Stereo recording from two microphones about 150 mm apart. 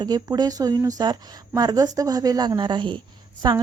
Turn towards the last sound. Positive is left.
turn(degrees=-25)  # may be behind; listen again after turning